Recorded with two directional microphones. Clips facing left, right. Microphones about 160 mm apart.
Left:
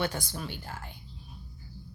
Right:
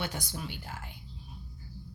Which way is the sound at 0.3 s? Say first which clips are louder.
Left 2 dB; 15° right (ahead or behind).